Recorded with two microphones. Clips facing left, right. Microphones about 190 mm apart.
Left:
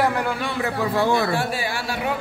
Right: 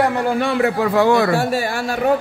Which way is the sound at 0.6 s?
70° right (ahead or behind).